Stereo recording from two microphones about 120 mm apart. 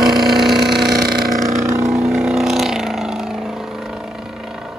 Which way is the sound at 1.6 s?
25° right (ahead or behind).